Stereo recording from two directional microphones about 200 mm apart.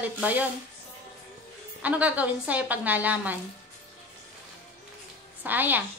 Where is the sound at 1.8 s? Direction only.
5° right (ahead or behind).